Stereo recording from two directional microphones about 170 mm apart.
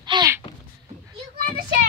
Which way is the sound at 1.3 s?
55° right (ahead or behind).